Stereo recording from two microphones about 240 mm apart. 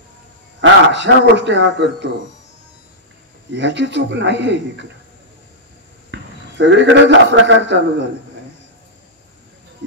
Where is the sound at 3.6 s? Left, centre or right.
Right.